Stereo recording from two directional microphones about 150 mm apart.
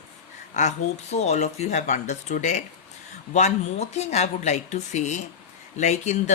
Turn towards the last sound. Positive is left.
turn(degrees=50)  # may be behind; listen again after turning